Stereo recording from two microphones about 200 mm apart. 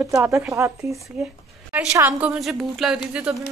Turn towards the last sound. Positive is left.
turn(degrees=-5)  # may be behind; listen again after turning